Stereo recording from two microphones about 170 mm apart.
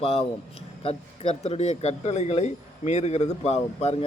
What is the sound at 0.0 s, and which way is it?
Speech, 35° left (ahead or behind).